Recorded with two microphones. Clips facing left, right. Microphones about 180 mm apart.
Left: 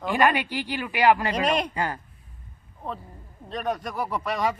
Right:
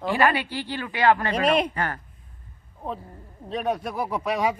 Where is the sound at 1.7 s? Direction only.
15° left (ahead or behind).